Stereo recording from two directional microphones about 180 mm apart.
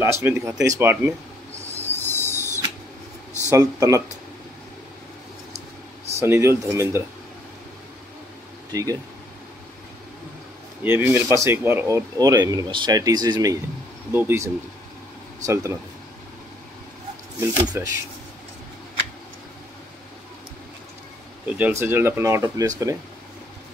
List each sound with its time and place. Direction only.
0.0 s speech: 15° right (ahead or behind)
2.0 s owl: 10° left (ahead or behind)
3.4 s speech: 20° right (ahead or behind)
6.1 s speech: 15° right (ahead or behind)
8.7 s speech: 20° right (ahead or behind)
10.8 s speech: 10° right (ahead or behind)
17.8 s speech: 15° right (ahead or behind)
21.5 s speech: 10° right (ahead or behind)